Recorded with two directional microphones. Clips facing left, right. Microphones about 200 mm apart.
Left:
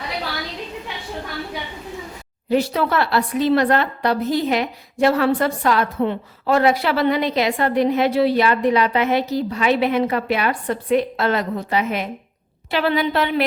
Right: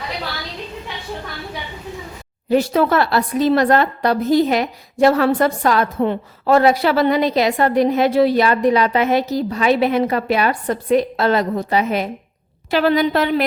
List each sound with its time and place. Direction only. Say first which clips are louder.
2.5 s a woman's voice: right 3 dB; 45° right (ahead or behind)